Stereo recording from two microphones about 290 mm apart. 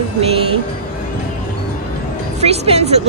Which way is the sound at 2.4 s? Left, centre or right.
Right.